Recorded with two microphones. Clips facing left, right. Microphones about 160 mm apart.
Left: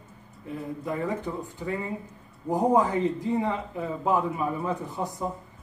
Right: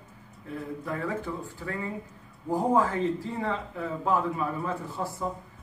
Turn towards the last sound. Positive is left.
turn(degrees=20)  # may be behind; listen again after turning